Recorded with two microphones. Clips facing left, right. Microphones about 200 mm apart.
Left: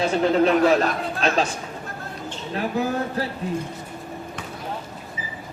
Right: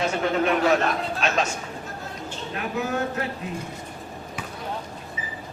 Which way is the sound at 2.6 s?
35° left (ahead or behind).